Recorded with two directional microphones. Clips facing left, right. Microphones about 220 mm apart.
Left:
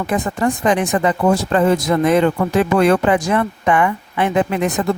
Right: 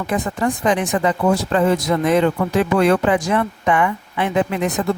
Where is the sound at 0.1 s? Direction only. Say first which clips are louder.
Left 1 dB; 50° left (ahead or behind).